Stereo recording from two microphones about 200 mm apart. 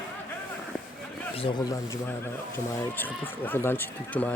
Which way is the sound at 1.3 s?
25° left (ahead or behind).